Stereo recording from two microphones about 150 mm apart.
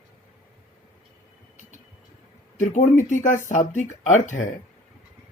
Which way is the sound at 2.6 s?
55° left (ahead or behind).